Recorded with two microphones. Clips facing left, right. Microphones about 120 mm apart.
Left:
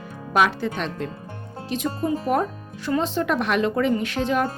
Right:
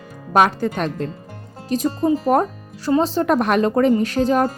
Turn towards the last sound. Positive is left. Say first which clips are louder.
# right 5 dB
turn(degrees=-40)  # may be behind; listen again after turning